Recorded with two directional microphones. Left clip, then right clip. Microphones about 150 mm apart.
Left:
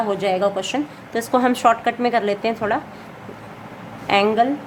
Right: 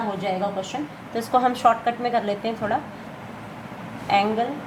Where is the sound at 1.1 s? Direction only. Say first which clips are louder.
Left 2 dB; 30° left (ahead or behind).